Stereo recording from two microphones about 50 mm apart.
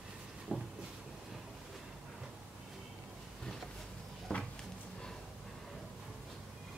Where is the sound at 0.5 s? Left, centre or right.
Right.